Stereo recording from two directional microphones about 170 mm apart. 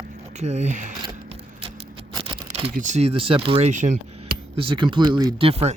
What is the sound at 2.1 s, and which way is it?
Typing, 30° right (ahead or behind).